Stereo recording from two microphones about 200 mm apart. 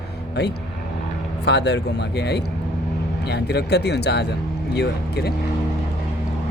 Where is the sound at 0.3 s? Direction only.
55° left (ahead or behind).